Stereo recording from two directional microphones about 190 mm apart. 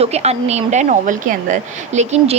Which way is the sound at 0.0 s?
35° right (ahead or behind).